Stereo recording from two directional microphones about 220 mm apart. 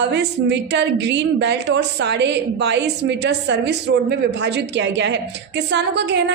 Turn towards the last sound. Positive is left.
turn(degrees=-50)  # may be behind; listen again after turning